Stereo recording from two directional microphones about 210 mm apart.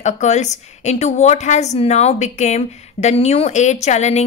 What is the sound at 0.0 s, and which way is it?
A woman's voice, 35° left (ahead or behind).